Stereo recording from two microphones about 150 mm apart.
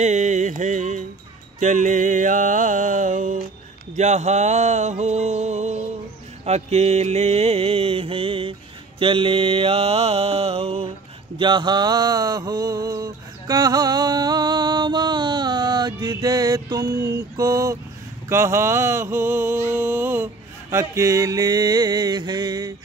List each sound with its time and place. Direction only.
0.0 s music: 50° right (ahead or behind)
3.9 s a sound: 50° right (ahead or behind)
6.4 s mantra: 45° right (ahead or behind); by 20.2 s 15° right (ahead or behind)
20.7 s music: 20° right (ahead or behind)